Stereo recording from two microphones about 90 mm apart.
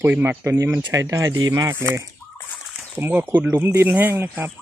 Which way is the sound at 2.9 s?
20° right (ahead or behind).